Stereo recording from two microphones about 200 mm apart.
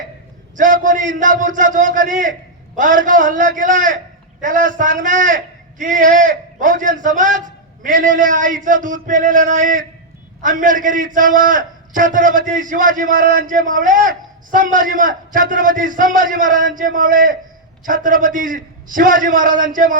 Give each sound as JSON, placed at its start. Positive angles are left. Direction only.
{"t": 0.5, "sound": "a man's voice", "side_deg": -40}